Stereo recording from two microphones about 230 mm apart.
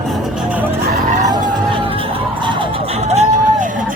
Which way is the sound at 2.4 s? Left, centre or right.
Right.